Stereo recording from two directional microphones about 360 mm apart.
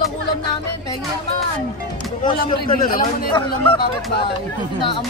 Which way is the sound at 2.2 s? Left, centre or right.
Left.